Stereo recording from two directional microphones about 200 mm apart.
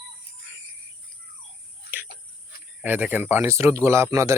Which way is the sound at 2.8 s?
10° right (ahead or behind).